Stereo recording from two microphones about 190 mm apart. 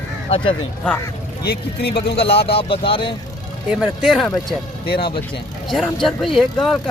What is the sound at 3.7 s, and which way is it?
Speech, 5° right (ahead or behind).